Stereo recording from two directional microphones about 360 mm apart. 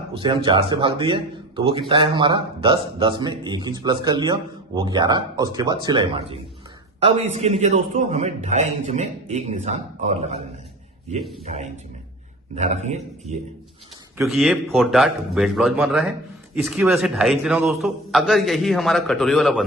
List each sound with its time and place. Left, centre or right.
0.2 s a man's voice: centre
12.5 s speech: centre
14.2 s a man's voice: centre